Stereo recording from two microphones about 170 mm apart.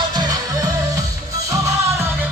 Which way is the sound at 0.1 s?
25° right (ahead or behind).